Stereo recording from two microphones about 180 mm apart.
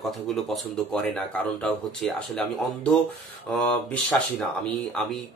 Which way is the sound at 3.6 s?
10° left (ahead or behind).